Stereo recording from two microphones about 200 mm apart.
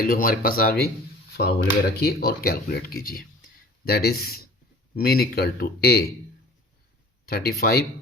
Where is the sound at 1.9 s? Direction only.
50° left (ahead or behind).